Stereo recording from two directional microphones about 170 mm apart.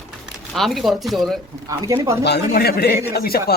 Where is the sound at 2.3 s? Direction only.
75° left (ahead or behind).